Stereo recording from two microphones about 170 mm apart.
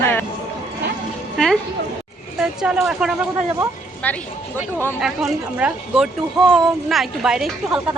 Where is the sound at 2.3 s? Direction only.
5° right (ahead or behind).